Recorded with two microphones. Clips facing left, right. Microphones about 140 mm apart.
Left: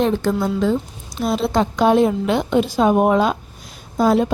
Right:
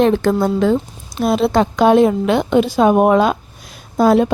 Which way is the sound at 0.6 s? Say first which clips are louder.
Right 4 dB; 65° right (ahead or behind).